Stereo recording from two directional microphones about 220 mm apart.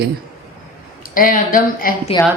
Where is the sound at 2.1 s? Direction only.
20° left (ahead or behind).